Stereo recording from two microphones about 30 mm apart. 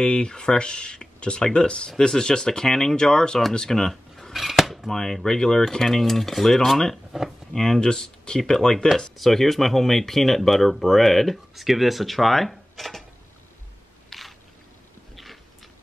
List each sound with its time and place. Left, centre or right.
0.0 s speech: left
4.3 s cutlery: centre
4.9 s cutlery: centre
7.1 s a sound: centre
7.5 s cutlery: centre
9.1 s speech: centre
11.5 s speech: centre
14.1 s single-lens reflex camera: centre